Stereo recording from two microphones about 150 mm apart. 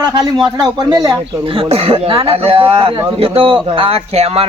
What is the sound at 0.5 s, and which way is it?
Speech, 25° right (ahead or behind).